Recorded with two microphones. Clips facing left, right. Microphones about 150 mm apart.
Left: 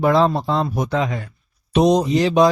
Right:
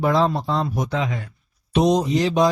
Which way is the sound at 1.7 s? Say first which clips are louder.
Left 3 dB; 70° left (ahead or behind).